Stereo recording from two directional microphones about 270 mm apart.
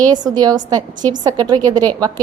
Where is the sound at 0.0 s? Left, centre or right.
Centre.